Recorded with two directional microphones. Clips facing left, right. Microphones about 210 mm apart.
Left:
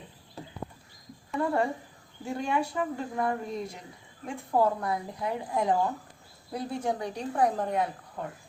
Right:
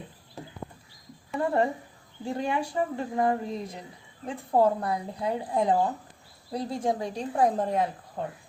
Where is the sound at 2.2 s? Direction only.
30° right (ahead or behind).